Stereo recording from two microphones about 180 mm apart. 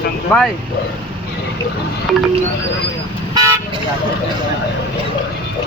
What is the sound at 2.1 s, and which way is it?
Music, centre (ahead or behind).